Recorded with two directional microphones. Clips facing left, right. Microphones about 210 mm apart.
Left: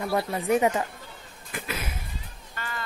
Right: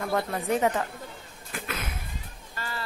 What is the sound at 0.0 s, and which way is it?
Speech, 5° left (ahead or behind).